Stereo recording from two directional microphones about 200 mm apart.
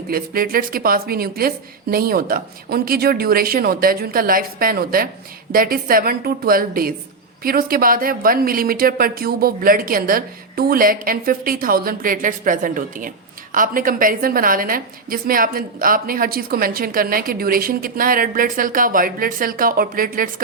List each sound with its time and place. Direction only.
0.1 s a woman's voice: 45° right (ahead or behind)